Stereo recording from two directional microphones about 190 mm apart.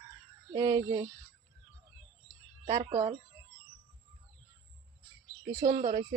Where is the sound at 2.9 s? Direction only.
15° right (ahead or behind).